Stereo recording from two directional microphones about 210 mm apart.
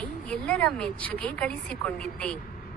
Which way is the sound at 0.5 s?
5° left (ahead or behind).